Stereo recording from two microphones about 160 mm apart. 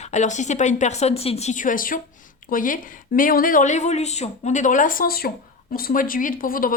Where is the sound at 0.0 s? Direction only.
50° left (ahead or behind).